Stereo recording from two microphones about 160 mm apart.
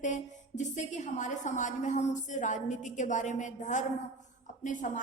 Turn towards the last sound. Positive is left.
turn(degrees=50)  # may be behind; listen again after turning